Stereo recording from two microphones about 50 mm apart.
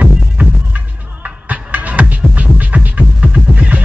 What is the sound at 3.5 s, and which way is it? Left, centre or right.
Vehicle, right.